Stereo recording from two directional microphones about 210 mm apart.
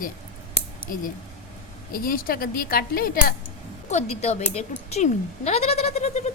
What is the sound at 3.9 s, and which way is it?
Speech, 30° left (ahead or behind).